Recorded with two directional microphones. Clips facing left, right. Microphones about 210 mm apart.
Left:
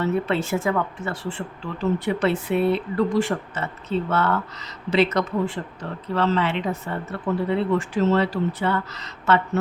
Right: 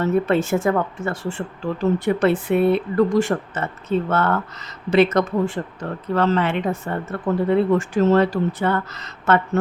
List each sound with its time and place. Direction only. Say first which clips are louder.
0.0 s speech: right 4 dB; 45° right (ahead or behind)